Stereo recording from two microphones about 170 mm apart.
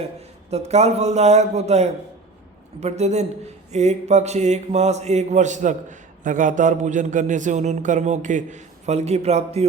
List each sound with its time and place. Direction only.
0.5 s a man's voice: 40° right (ahead or behind)